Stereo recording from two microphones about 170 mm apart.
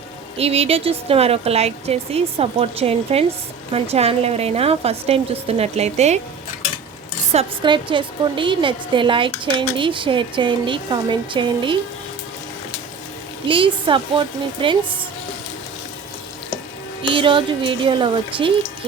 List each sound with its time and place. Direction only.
0.3 s speech: 35° right (ahead or behind)
7.3 s a woman's voice: 30° right (ahead or behind)
13.5 s a woman's voice: 30° right (ahead or behind)
17.0 s speech: 30° right (ahead or behind)